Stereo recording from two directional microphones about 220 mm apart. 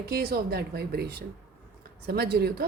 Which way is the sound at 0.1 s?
45° right (ahead or behind).